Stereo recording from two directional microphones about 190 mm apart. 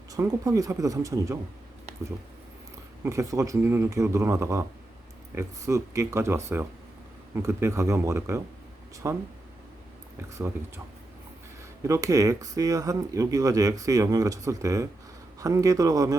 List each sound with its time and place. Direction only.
0.1 s speech: 20° right (ahead or behind)
3.0 s speech: 15° right (ahead or behind)
11.8 s speech: 15° right (ahead or behind)